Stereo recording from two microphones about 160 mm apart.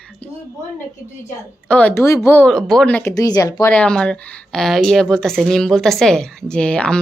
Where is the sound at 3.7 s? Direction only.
5° left (ahead or behind).